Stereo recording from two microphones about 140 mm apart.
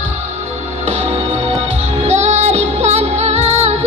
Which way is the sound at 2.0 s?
50° right (ahead or behind).